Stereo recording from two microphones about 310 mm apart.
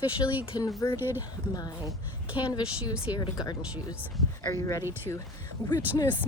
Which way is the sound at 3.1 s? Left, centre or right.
Centre.